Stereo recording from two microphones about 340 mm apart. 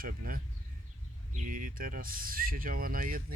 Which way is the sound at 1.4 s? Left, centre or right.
Right.